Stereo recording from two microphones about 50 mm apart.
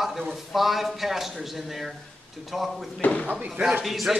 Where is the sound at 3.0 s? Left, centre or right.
Left.